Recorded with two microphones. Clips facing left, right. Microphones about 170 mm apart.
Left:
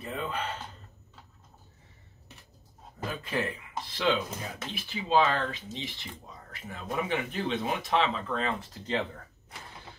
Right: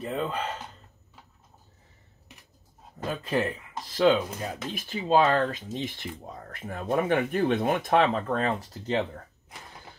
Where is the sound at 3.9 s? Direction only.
45° right (ahead or behind).